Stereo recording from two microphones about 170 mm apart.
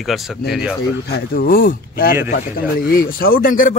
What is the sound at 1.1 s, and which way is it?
Speech, 60° left (ahead or behind).